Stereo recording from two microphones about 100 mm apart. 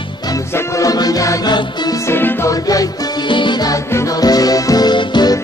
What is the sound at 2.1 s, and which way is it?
Music, 20° left (ahead or behind).